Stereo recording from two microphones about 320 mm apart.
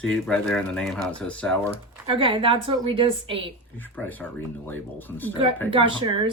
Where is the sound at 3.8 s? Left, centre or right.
Centre.